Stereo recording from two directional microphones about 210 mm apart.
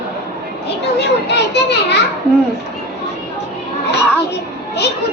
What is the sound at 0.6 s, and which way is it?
A child's voice, 55° left (ahead or behind).